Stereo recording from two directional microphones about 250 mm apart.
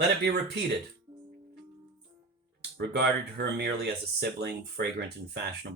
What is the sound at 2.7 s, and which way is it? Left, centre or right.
Speech, right.